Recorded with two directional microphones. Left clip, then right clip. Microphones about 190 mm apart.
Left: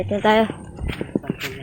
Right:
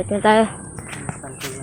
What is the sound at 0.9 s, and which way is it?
Music, 10° left (ahead or behind).